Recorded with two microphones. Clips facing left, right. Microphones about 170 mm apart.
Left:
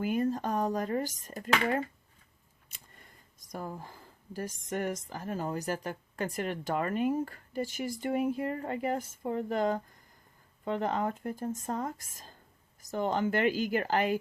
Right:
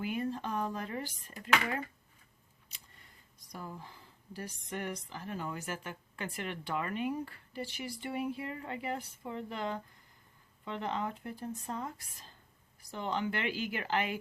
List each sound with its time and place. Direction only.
0.0 s speech: 45° left (ahead or behind)